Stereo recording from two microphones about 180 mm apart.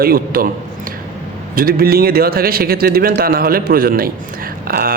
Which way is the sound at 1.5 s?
55° right (ahead or behind).